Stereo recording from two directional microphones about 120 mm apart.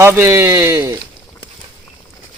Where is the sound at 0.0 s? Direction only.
20° right (ahead or behind).